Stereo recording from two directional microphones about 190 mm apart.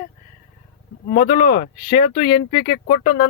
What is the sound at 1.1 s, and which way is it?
Speech, 50° left (ahead or behind).